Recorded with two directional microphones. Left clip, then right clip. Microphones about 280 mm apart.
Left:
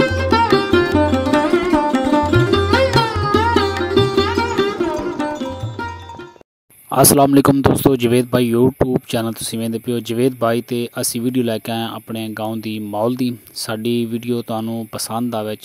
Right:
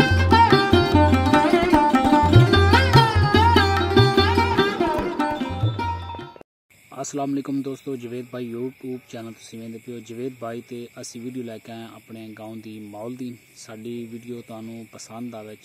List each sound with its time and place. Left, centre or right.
0.0 s music: centre
6.9 s speech: left